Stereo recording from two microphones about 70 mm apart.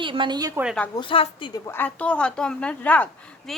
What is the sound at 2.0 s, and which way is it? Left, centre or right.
A woman's voice, centre.